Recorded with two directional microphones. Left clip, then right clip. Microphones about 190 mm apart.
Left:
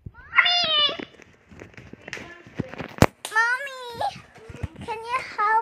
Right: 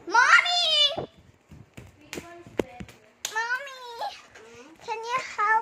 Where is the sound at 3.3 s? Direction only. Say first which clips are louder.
Left 7 dB; 20° left (ahead or behind).